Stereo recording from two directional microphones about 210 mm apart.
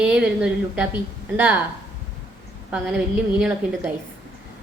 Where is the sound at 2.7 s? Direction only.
5° right (ahead or behind).